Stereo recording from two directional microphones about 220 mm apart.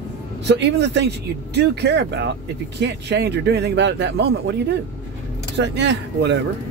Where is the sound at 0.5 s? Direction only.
50° right (ahead or behind).